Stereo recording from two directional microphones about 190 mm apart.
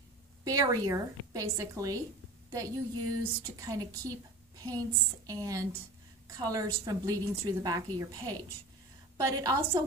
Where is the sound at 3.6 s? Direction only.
20° right (ahead or behind).